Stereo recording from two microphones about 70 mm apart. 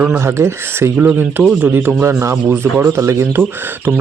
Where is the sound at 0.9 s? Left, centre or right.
Right.